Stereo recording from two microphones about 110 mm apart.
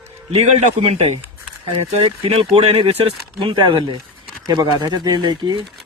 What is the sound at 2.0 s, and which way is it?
Speech, 55° right (ahead or behind).